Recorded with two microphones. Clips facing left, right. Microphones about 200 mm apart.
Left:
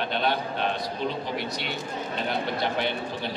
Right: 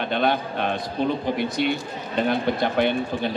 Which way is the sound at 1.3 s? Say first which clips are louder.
Right 8 dB; 50° right (ahead or behind).